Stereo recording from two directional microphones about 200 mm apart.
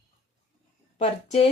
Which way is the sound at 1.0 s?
35° left (ahead or behind).